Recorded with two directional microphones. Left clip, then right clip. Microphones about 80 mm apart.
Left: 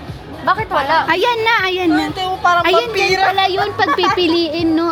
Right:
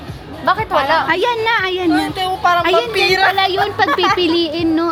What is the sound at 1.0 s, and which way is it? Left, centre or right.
Speech, centre.